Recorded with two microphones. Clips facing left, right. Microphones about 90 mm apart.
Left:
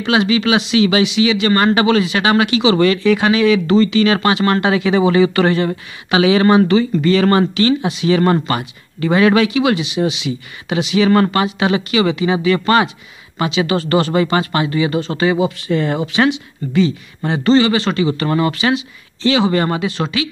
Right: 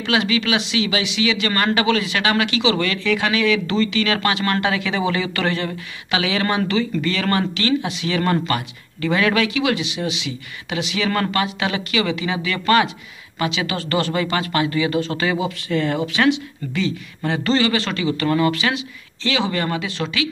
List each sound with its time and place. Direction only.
0.0 s speech: 20° left (ahead or behind)
0.6 s speech: 40° left (ahead or behind)
1.0 s speech: 20° left (ahead or behind)